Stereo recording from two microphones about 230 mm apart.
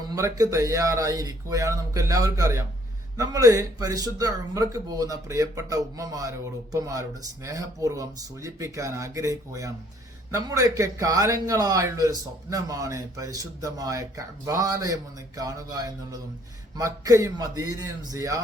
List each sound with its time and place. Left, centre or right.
0.1 s a man's voice: centre